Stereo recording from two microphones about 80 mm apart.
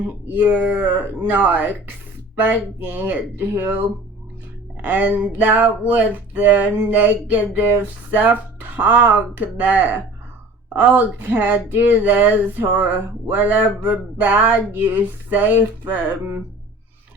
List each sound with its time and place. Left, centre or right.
0.3 s speech: right